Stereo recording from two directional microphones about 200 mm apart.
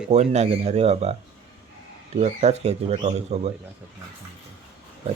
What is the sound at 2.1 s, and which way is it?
Speech, 30° right (ahead or behind).